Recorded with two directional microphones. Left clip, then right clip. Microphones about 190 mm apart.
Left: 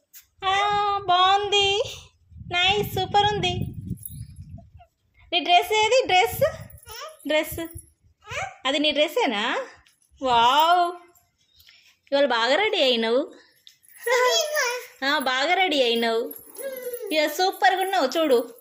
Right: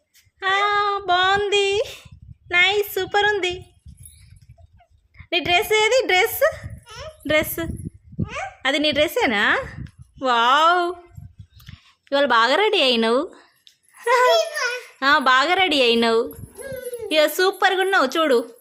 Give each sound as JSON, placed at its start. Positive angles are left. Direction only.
{"t": 0.3, "sound": "child singing", "side_deg": -30}
{"t": 2.5, "sound": "a sound", "side_deg": -35}
{"t": 5.1, "sound": "a child's voice", "side_deg": -35}
{"t": 14.3, "sound": "babbling", "side_deg": -15}
{"t": 14.9, "sound": "speech", "side_deg": -35}